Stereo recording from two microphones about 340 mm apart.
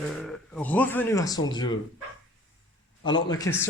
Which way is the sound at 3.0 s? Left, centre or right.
Centre.